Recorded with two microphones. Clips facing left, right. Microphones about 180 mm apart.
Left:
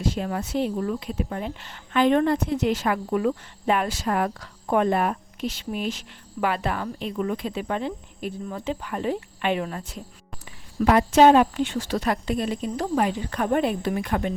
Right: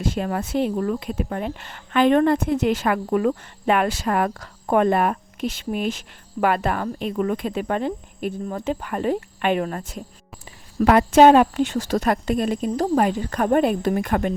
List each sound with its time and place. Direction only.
0.0 s speech: 55° right (ahead or behind)
4.4 s speech: 55° right (ahead or behind)
10.8 s speech: 60° right (ahead or behind)